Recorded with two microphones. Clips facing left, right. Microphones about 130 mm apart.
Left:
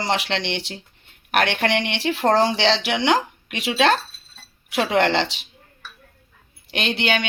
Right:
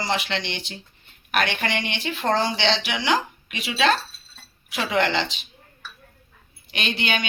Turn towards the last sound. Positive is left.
turn(degrees=75)  # may be behind; listen again after turning